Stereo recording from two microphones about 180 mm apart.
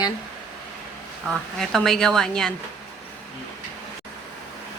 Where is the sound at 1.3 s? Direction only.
Centre (ahead or behind).